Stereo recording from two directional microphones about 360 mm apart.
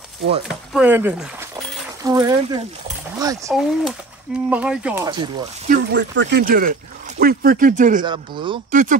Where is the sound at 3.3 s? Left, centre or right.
Centre.